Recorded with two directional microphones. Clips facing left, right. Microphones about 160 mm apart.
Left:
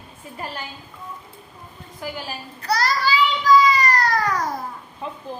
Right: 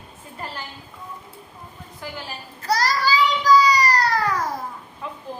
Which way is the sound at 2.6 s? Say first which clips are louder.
Even; 40° right (ahead or behind).